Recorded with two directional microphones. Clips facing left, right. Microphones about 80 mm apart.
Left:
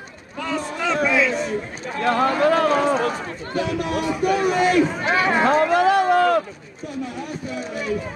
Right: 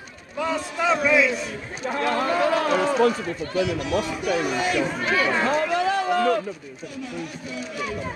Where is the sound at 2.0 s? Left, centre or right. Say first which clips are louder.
Left 5 dB; left.